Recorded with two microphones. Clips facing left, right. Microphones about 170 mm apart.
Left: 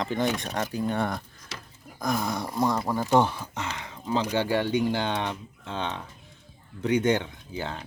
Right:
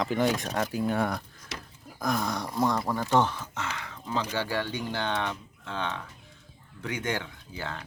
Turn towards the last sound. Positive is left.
turn(degrees=20)  # may be behind; listen again after turning